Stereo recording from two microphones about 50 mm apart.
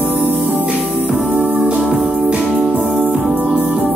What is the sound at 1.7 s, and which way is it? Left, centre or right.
Music, centre.